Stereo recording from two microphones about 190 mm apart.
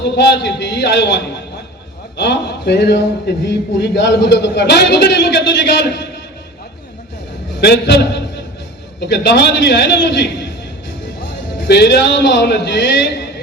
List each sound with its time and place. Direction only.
0.0 s a man's voice: 65° left (ahead or behind)
7.5 s a man's voice: 65° left (ahead or behind)